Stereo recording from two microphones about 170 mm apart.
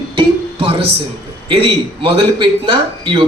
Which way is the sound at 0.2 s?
35° right (ahead or behind).